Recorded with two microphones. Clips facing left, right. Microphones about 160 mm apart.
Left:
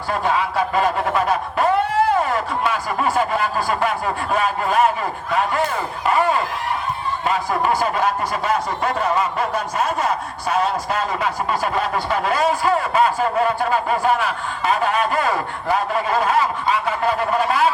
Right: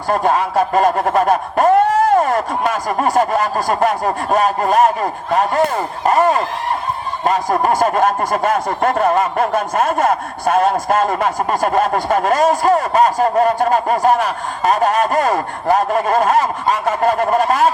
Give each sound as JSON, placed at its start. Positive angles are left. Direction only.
{"t": 0.1, "sound": "speech", "side_deg": -45}